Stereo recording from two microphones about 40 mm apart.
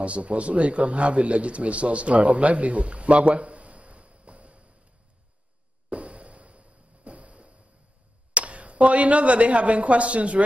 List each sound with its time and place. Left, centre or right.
0.0 s speech: right
5.9 s a sound: right
8.3 s speech: right